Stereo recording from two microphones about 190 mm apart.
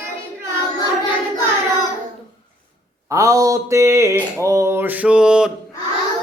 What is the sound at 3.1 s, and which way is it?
Mantra, 15° right (ahead or behind).